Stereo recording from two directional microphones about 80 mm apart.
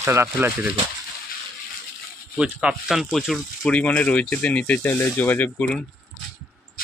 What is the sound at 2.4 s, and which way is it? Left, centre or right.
Speech, centre.